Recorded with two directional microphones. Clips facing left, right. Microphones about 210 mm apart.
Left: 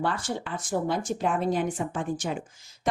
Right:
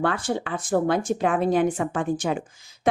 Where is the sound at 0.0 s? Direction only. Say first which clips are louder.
Right 5 dB; 60° right (ahead or behind).